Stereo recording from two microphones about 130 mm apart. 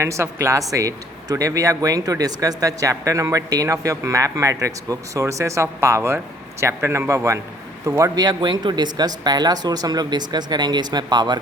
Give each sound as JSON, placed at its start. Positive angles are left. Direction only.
{"t": 0.0, "sound": "speech", "side_deg": -20}